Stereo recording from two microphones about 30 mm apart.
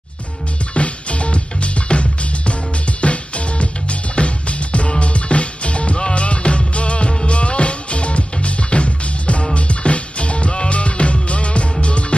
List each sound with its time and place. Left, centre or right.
0.7 s music: left